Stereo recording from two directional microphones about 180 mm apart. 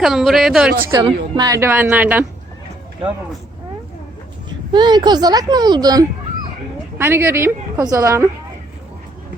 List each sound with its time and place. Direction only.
0.0 s a woman's voice: centre (ahead or behind)
0.9 s a woman's voice: 20° right (ahead or behind)
4.4 s a woman's voice: 25° right (ahead or behind)